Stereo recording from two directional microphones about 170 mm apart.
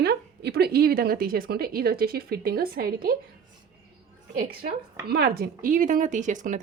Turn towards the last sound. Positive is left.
turn(degrees=-50)  # may be behind; listen again after turning